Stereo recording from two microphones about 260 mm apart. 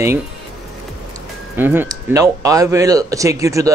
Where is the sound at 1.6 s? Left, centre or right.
Centre.